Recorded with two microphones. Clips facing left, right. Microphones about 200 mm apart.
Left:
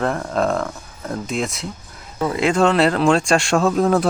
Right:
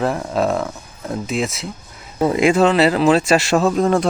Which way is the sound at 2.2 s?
25° right (ahead or behind).